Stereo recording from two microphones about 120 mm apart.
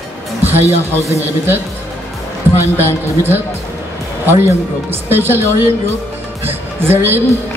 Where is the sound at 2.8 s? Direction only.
15° right (ahead or behind).